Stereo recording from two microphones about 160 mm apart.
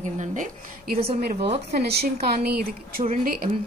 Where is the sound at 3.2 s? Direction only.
65° right (ahead or behind).